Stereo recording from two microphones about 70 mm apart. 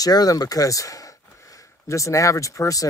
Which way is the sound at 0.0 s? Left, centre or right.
Left.